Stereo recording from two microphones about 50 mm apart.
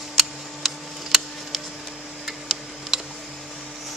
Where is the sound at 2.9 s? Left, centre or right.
Centre.